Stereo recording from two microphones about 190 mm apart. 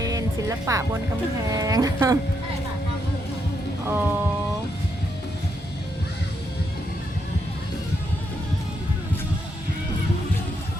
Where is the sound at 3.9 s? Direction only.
10° right (ahead or behind).